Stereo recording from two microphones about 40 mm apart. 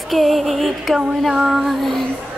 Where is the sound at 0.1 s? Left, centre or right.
Centre.